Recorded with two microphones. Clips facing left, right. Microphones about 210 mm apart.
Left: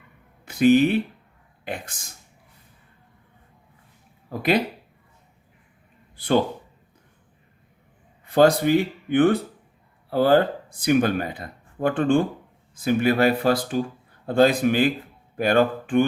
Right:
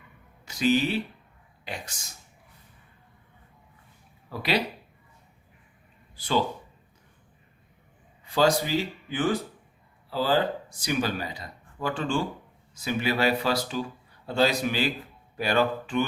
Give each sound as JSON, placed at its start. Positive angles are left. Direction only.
{"t": 0.4, "sound": "speech", "side_deg": 55}
{"t": 4.3, "sound": "speech", "side_deg": 50}
{"t": 6.1, "sound": "speech", "side_deg": 55}
{"t": 8.2, "sound": "speech", "side_deg": 55}